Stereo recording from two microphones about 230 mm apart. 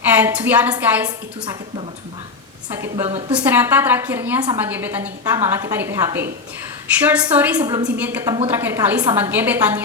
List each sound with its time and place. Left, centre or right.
0.1 s a woman's voice: centre
2.6 s a woman's voice: centre
3.1 s a woman's voice: right
3.3 s a woman's voice: centre